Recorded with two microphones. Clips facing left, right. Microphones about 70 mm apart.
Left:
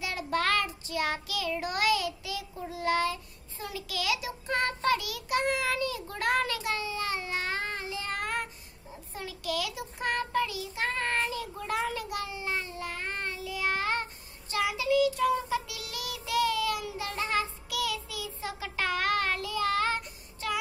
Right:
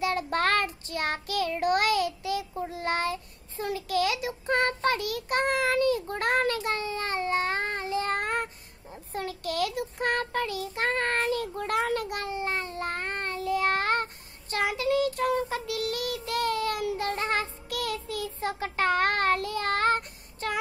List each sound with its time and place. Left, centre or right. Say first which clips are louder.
0.0 s child singing: right 4 dB; right
9.1 s child singing: right 3 dB; right